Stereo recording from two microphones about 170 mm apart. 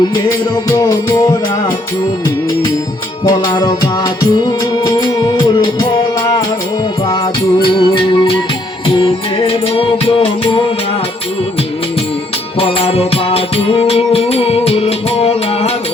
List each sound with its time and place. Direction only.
0.0 s music: 20° left (ahead or behind)
3.2 s music: 25° left (ahead or behind)
7.8 s music: 30° left (ahead or behind)
12.5 s music: 35° left (ahead or behind)